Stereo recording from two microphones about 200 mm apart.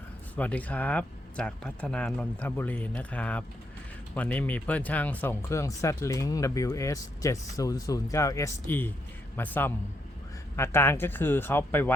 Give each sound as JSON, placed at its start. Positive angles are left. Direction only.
{"t": 0.3, "sound": "speech", "side_deg": 5}